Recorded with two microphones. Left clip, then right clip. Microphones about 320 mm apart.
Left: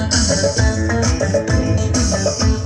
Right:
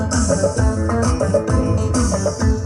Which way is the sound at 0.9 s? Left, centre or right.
Right.